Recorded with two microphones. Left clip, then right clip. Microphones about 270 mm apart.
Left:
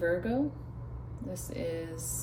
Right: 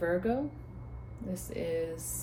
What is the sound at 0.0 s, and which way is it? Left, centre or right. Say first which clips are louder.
Speech: left 1 dB; centre.